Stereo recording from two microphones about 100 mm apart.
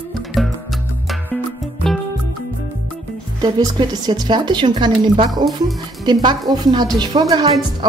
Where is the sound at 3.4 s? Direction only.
45° right (ahead or behind).